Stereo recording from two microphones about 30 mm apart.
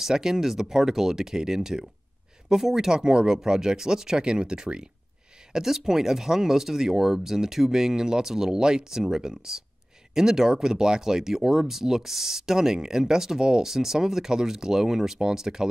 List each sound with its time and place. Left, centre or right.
0.0 s speech: centre
5.5 s speech: centre